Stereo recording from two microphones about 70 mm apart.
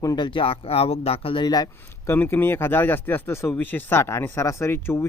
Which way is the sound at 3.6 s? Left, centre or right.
Left.